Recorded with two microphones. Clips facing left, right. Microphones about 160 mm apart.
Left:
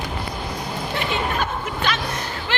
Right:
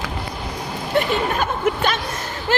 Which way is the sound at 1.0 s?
45° right (ahead or behind).